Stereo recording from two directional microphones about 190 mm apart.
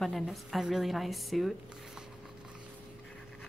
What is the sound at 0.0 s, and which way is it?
A woman's voice, centre (ahead or behind).